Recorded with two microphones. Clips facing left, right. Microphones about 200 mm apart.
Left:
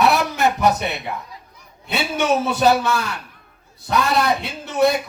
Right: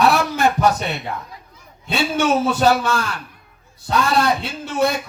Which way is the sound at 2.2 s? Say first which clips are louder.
Even; 20° left (ahead or behind).